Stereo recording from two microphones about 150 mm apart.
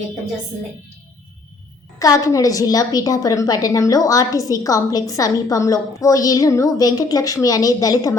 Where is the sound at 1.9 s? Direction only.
20° left (ahead or behind).